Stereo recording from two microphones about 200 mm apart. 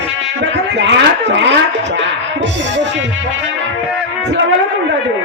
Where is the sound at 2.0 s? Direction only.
60° right (ahead or behind).